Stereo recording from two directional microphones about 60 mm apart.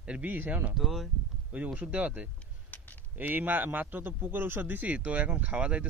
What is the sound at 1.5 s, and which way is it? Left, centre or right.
A man's voice, right.